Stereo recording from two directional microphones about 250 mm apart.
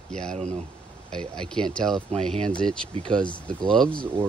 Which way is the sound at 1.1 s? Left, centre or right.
Centre.